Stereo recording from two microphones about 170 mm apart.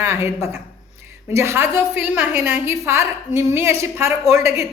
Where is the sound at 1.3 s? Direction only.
15° right (ahead or behind).